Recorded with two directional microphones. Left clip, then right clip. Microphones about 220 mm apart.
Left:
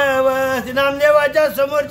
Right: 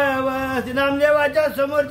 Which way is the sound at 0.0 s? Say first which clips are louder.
Left 5 dB; 15° left (ahead or behind).